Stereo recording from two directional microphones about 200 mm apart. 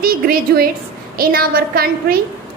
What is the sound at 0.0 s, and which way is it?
A woman's voice, 50° right (ahead or behind).